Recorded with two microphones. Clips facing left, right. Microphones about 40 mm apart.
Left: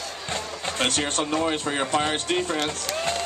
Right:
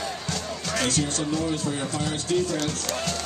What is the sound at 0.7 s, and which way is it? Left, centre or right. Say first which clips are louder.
Speech: left 1 dB; left.